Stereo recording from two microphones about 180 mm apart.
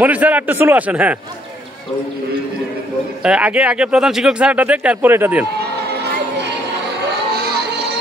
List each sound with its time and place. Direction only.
0.0 s speech: 10° right (ahead or behind)
3.2 s speech: 5° right (ahead or behind)
6.0 s music: 70° right (ahead or behind)